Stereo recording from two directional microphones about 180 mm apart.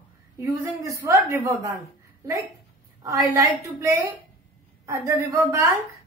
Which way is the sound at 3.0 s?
20° right (ahead or behind).